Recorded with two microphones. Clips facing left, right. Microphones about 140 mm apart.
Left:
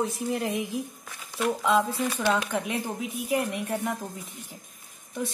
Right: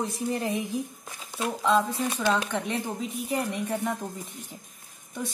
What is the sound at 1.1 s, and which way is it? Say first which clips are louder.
Speech: left 7 dB; 15° right (ahead or behind).